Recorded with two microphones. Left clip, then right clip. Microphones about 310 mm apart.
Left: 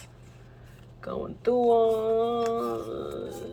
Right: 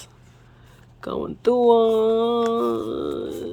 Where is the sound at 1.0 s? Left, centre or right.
Right.